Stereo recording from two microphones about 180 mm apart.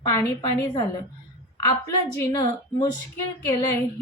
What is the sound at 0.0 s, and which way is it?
Speech, 15° left (ahead or behind).